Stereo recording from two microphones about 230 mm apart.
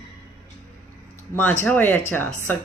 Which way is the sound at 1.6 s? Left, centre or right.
Centre.